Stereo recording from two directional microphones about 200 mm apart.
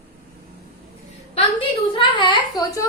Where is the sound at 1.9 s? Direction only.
25° left (ahead or behind).